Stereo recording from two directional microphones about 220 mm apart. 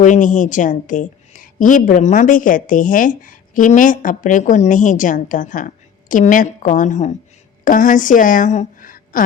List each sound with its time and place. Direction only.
0.0 s a woman's voice: 35° left (ahead or behind)